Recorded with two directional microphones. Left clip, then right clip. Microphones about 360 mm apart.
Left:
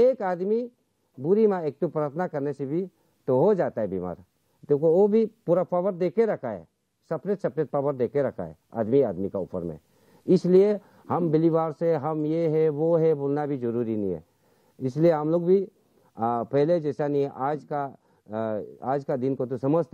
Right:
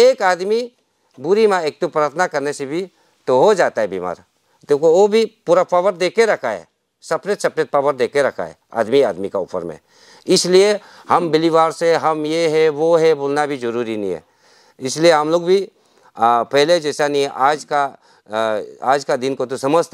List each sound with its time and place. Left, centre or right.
0.0 s speech: centre
4.7 s a man's voice: centre
5.1 s speech: centre